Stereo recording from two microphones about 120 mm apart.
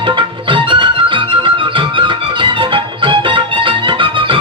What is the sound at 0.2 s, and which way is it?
Music, 45° right (ahead or behind).